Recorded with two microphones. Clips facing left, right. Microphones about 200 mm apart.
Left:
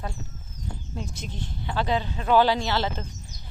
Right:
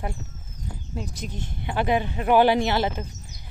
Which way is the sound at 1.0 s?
5° right (ahead or behind).